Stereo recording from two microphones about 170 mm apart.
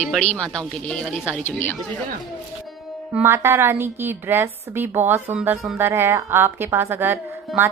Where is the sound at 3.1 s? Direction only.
15° right (ahead or behind).